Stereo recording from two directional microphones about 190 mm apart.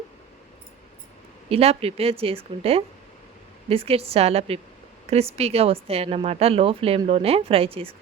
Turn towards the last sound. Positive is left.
turn(degrees=-30)  # may be behind; listen again after turning